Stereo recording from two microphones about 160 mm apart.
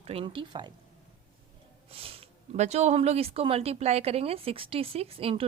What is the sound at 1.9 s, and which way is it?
A woman's voice, 35° right (ahead or behind).